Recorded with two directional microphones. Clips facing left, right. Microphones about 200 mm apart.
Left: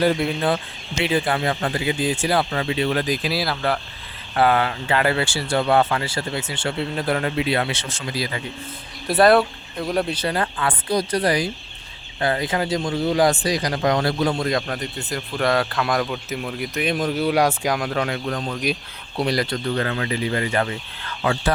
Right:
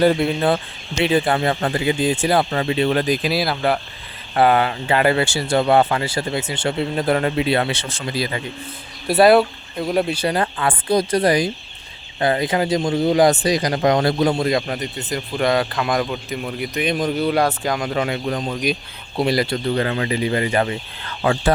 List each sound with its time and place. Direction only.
0.0 s speech: 25° right (ahead or behind)
9.2 s a man's voice: 5° right (ahead or behind)
10.4 s speech: 25° right (ahead or behind)
14.4 s a man's voice: 5° right (ahead or behind)
17.7 s a man's voice: centre (ahead or behind)
19.7 s speech: 20° right (ahead or behind)